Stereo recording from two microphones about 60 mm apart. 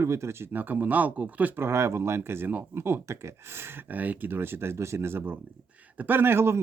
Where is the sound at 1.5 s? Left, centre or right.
Right.